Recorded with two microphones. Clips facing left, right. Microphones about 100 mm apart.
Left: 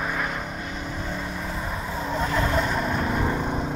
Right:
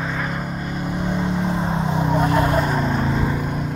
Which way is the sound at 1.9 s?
20° right (ahead or behind).